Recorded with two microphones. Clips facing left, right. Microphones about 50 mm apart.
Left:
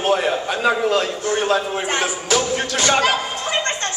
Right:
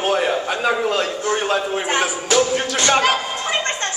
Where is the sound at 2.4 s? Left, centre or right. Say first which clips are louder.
Right 3 dB; centre.